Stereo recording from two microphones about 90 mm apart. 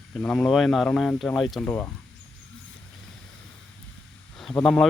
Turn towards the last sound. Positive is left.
turn(degrees=5)  # may be behind; listen again after turning